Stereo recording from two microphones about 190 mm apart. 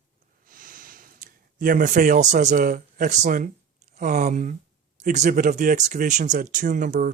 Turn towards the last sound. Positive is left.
turn(degrees=-45)  # may be behind; listen again after turning